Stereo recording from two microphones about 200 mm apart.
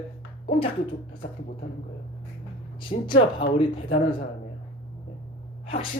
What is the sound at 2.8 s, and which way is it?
Speech, 25° left (ahead or behind).